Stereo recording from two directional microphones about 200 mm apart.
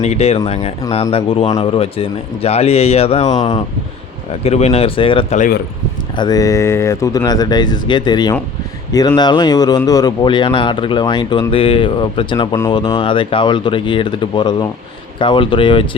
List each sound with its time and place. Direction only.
0.0 s a man's voice: 30° left (ahead or behind)